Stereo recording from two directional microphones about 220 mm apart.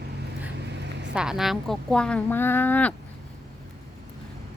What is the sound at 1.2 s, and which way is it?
Speech, centre (ahead or behind).